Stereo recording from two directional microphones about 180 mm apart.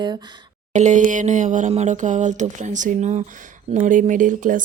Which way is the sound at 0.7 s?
40° right (ahead or behind).